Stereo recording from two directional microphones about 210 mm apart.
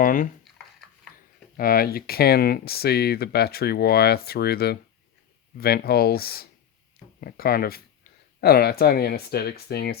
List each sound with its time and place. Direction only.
0.0 s speech: 40° left (ahead or behind)
1.5 s speech: 45° left (ahead or behind)